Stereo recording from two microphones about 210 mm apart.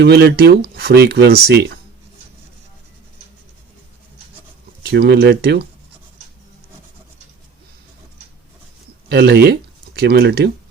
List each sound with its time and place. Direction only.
0.0 s speech: 55° right (ahead or behind)
4.9 s speech: 50° right (ahead or behind)
9.0 s speech: 50° right (ahead or behind)